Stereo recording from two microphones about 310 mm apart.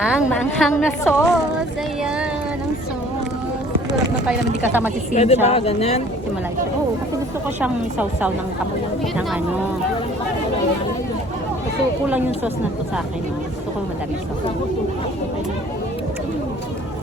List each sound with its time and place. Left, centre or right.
0.0 s a woman's voice: centre
4.3 s a woman's voice: centre
5.1 s speech: left
7.6 s a woman's voice: centre
12.0 s a woman's voice: centre